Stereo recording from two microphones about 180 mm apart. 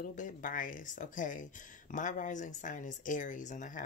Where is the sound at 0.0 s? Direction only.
45° left (ahead or behind).